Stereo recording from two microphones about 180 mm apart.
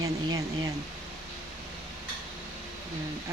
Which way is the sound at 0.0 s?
20° right (ahead or behind).